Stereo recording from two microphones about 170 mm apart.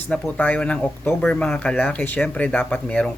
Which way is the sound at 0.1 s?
10° left (ahead or behind).